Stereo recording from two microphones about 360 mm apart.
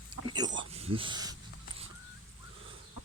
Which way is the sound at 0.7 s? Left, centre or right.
Centre.